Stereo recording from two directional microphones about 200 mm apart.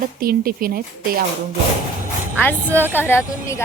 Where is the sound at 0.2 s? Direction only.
45° right (ahead or behind).